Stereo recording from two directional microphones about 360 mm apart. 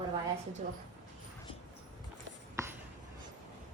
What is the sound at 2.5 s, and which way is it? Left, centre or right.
Writing, centre.